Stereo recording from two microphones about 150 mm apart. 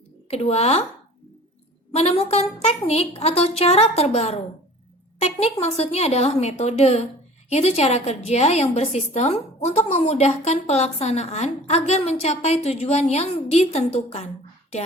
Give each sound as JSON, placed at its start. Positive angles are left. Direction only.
{"t": 0.3, "sound": "a woman's voice", "side_deg": 45}
{"t": 2.0, "sound": "a woman's voice", "side_deg": 40}